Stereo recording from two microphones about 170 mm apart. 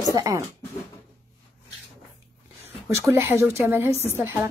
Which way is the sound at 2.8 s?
15° right (ahead or behind).